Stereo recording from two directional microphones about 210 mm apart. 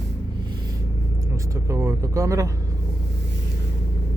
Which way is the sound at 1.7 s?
15° right (ahead or behind).